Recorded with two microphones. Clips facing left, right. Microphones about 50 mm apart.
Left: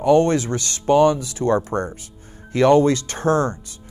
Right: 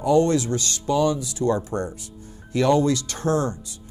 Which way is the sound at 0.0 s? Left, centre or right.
Left.